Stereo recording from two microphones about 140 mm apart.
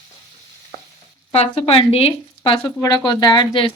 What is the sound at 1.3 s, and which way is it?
Speech, 40° left (ahead or behind).